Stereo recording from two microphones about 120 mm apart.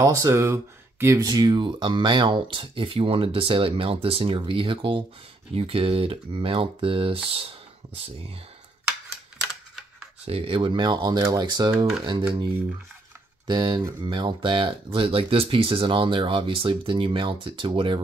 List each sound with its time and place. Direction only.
0.0 s speech: 25° right (ahead or behind); by 7.2 s 50° right (ahead or behind)
10.2 s speech: 50° right (ahead or behind)
13.5 s speech: 35° right (ahead or behind)